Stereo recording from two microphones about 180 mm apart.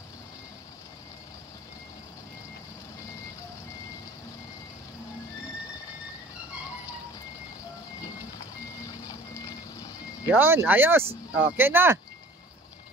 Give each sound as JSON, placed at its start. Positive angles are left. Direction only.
{"t": 8.8, "sound": "reversing beeps", "side_deg": 20}
{"t": 10.2, "sound": "speech", "side_deg": -10}